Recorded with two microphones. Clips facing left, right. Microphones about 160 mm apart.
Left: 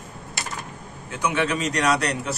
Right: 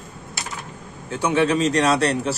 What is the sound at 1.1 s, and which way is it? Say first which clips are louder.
A man's voice: right 5 dB; 30° right (ahead or behind).